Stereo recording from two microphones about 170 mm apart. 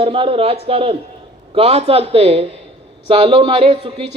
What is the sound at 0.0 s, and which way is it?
A woman's voice, 35° right (ahead or behind).